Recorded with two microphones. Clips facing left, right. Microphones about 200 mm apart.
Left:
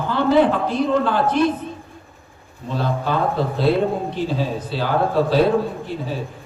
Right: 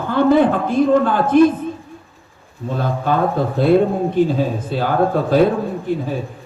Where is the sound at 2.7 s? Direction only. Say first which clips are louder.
Right 3 dB; 50° right (ahead or behind).